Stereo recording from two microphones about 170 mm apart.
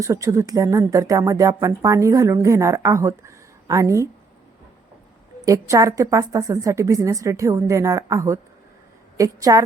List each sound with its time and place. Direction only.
0.0 s speech: 20° right (ahead or behind)
5.5 s speech: 20° right (ahead or behind)